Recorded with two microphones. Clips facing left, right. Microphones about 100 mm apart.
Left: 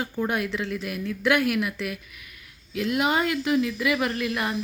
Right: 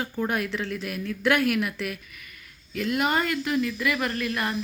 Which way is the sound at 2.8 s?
15° left (ahead or behind).